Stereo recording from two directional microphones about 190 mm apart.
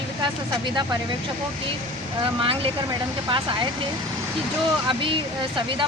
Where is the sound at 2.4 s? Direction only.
30° right (ahead or behind).